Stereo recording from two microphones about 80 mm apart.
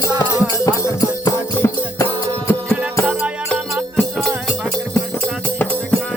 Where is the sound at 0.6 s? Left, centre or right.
Left.